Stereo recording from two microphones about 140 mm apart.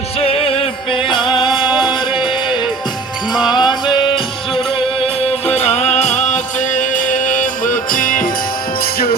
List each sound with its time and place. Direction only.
0.2 s music: 45° left (ahead or behind)
3.5 s music: 30° left (ahead or behind)
5.5 s music: 50° left (ahead or behind); by 8.3 s 80° left